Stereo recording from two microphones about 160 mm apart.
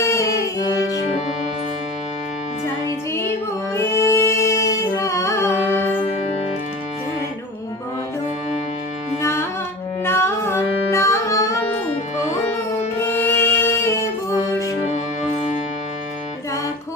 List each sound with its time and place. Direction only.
0.0 s music: 20° left (ahead or behind)
3.8 s music: 15° left (ahead or behind)
9.2 s music: 15° left (ahead or behind)
13.0 s music: 15° left (ahead or behind)